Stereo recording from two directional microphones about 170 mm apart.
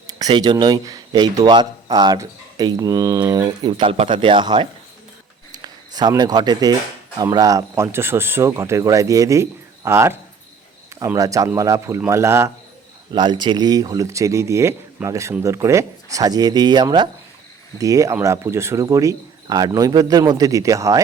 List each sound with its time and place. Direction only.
0.1 s a man's voice: 25° right (ahead or behind)
5.5 s a sound: 25° right (ahead or behind)
7.2 s speech: 20° right (ahead or behind)
13.1 s a man's voice: 25° right (ahead or behind)